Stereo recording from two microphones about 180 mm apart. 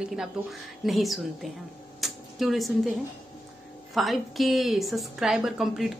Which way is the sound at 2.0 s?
Centre (ahead or behind).